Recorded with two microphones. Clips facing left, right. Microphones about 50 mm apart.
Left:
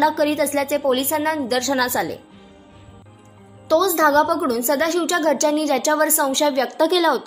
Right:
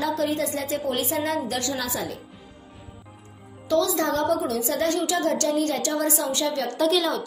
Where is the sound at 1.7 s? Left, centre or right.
Left.